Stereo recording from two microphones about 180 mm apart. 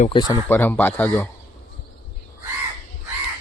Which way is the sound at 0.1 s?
25° left (ahead or behind).